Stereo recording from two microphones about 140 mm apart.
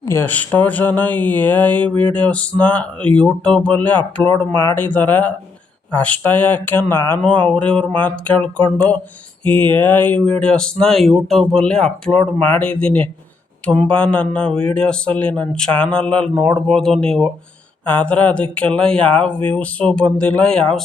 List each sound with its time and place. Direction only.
0.0 s speech: 20° left (ahead or behind)